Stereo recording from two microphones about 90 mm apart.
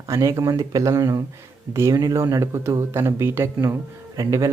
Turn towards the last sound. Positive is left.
turn(degrees=-40)  # may be behind; listen again after turning